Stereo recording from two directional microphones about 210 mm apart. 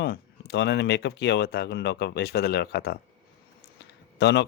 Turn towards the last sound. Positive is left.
turn(degrees=55)  # may be behind; listen again after turning